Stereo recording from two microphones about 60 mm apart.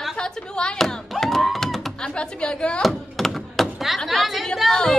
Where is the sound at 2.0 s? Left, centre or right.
Centre.